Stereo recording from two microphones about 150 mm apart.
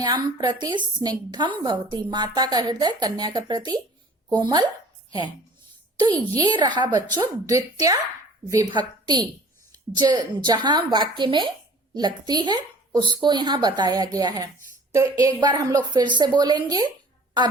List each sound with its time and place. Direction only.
0.0 s a woman's voice: 30° right (ahead or behind)
6.0 s a woman's voice: 30° right (ahead or behind)